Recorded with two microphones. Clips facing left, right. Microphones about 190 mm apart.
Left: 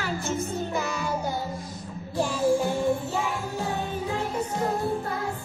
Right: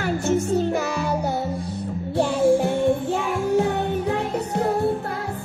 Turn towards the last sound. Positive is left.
turn(degrees=-65)  # may be behind; listen again after turning